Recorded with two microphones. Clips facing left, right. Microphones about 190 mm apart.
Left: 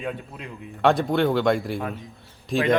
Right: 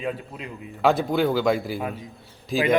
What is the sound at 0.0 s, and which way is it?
A man's voice, centre (ahead or behind).